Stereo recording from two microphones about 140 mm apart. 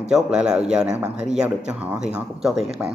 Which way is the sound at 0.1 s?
5° right (ahead or behind).